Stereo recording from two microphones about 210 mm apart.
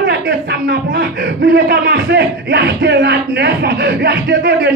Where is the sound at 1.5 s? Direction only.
50° right (ahead or behind).